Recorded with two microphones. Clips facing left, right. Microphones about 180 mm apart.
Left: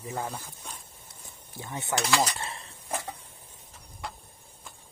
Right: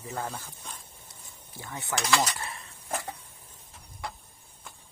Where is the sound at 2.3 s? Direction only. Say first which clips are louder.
Left 1 dB; 30° left (ahead or behind).